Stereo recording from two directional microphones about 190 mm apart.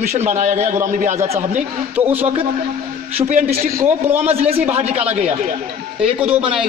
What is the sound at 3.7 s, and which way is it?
Speech, 10° right (ahead or behind).